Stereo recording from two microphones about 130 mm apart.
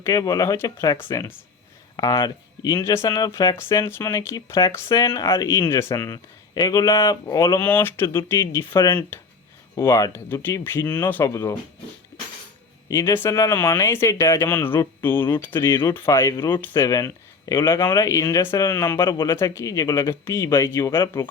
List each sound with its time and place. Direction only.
0.0 s speech: 25° left (ahead or behind)
12.9 s speech: 20° left (ahead or behind)